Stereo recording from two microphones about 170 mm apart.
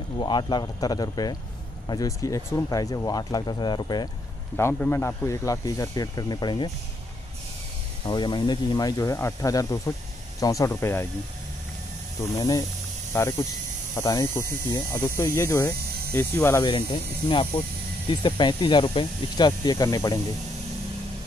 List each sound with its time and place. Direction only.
0.2 s speech: 25° left (ahead or behind)
4.6 s speech: 10° left (ahead or behind)
8.0 s speech: 25° left (ahead or behind)
12.4 s speech: 20° left (ahead or behind)
16.6 s speech: 30° left (ahead or behind)